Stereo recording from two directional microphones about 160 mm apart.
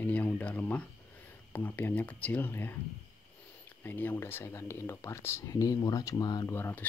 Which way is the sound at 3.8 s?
10° left (ahead or behind).